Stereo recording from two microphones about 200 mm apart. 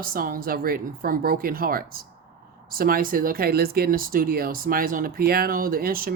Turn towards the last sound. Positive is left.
turn(degrees=-45)  # may be behind; listen again after turning